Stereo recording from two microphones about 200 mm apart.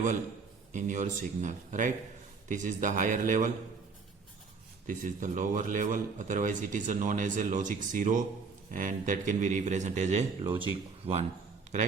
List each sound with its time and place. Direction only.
0.7 s a man's voice: 40° right (ahead or behind)
4.9 s a man's voice: 40° right (ahead or behind)